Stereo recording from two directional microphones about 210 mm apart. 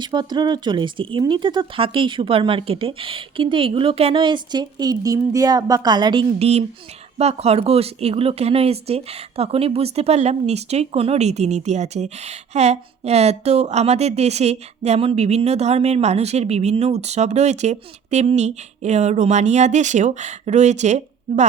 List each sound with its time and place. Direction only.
0.0 s speech: 20° right (ahead or behind)